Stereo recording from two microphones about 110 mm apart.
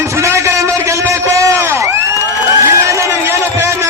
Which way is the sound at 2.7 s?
25° right (ahead or behind).